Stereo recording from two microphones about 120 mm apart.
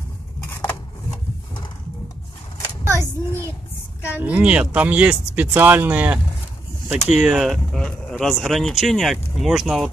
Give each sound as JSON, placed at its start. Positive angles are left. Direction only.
{"t": 0.5, "sound": "a sound", "side_deg": 20}
{"t": 2.8, "sound": "child singing", "side_deg": -20}
{"t": 4.2, "sound": "speech", "side_deg": -10}
{"t": 7.7, "sound": "speech", "side_deg": 5}